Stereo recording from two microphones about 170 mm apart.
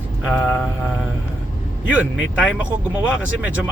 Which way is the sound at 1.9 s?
10° right (ahead or behind).